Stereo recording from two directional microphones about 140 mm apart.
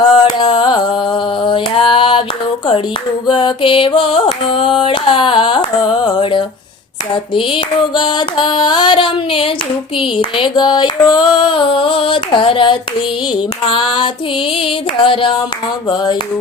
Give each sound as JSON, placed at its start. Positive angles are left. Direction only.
{"t": 0.0, "sound": "music", "side_deg": 30}
{"t": 3.2, "sound": "female singing", "side_deg": 35}